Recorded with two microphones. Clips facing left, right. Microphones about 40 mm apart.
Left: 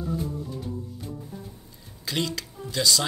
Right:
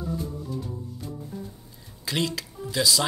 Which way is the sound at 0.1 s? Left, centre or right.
Centre.